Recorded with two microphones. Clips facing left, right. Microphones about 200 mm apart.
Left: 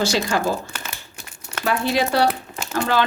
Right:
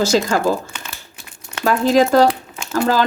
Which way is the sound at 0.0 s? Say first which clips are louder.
Right 5 dB; 45° right (ahead or behind).